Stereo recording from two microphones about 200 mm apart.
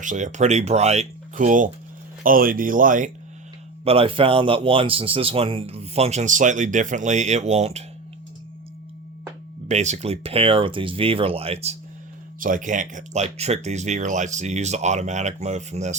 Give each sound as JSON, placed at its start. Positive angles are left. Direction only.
{"t": 0.0, "sound": "speech", "side_deg": -40}
{"t": 3.8, "sound": "speech", "side_deg": -30}
{"t": 9.6, "sound": "speech", "side_deg": -35}
{"t": 12.4, "sound": "speech", "side_deg": -40}